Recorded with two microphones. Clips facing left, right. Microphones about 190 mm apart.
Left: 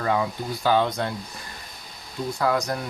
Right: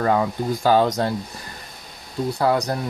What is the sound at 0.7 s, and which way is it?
Speech, 40° right (ahead or behind).